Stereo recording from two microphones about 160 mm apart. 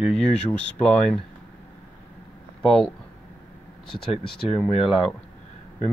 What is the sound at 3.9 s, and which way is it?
Speech, 35° left (ahead or behind).